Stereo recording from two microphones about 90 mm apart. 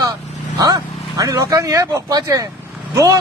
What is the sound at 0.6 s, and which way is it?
Speech, 45° right (ahead or behind).